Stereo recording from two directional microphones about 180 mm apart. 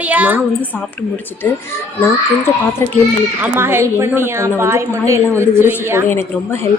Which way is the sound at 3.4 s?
15° right (ahead or behind).